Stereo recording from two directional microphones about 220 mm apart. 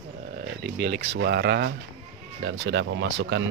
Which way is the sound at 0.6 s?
45° right (ahead or behind).